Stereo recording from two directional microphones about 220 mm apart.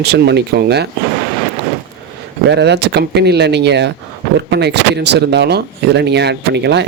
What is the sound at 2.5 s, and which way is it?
Speech, 50° right (ahead or behind).